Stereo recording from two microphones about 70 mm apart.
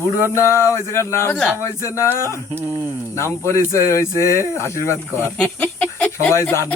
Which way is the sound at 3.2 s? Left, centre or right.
Left.